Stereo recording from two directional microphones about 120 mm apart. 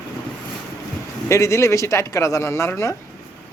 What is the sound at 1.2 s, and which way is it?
Speech, 25° left (ahead or behind).